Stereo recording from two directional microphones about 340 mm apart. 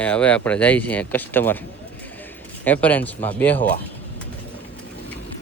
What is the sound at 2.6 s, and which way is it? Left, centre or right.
Speech, centre.